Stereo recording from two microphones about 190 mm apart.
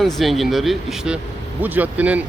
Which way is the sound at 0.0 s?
Centre (ahead or behind).